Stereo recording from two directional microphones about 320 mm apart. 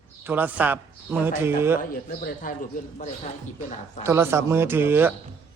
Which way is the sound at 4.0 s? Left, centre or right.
Centre.